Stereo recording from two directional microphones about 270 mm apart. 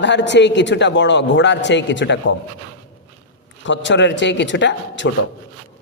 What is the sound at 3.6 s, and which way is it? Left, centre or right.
A man's voice, left.